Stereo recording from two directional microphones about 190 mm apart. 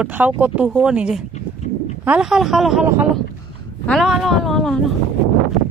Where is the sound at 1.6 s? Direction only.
35° left (ahead or behind).